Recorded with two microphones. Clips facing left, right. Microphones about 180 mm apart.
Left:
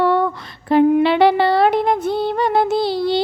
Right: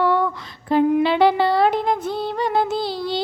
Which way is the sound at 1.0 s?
70° left (ahead or behind).